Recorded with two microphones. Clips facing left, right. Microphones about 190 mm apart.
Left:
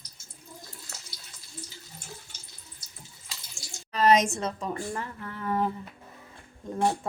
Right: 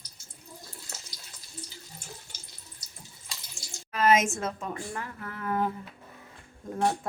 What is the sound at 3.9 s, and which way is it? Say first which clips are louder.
A woman's voice: left 2 dB; centre (ahead or behind).